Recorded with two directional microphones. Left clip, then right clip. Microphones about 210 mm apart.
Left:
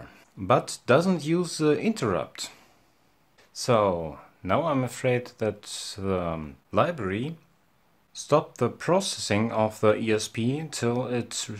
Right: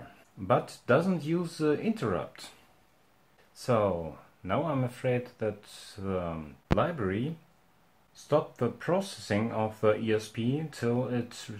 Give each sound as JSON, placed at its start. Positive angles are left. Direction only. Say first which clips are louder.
{"t": 0.5, "sound": "speech", "louder": "left 4 dB", "side_deg": 40}
{"t": 3.5, "sound": "speech", "louder": "left 5 dB", "side_deg": 40}